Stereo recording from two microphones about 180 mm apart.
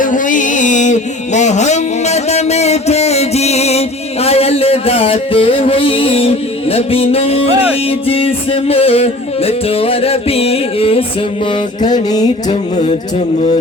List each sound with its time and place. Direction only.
0.0 s music: 45° left (ahead or behind)
12.5 s music: 35° left (ahead or behind)